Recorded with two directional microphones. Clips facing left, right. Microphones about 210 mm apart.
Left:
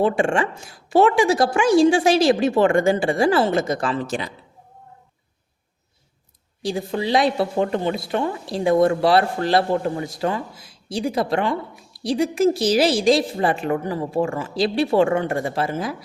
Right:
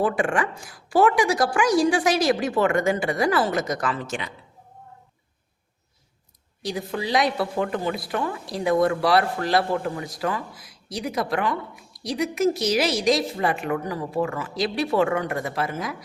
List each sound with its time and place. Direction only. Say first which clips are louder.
0.0 s speech: left 4 dB; 25° left (ahead or behind)
6.6 s speech: left 4 dB; 30° left (ahead or behind)